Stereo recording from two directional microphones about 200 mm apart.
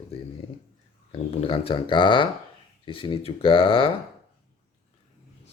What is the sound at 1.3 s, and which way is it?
A man's voice, 30° left (ahead or behind).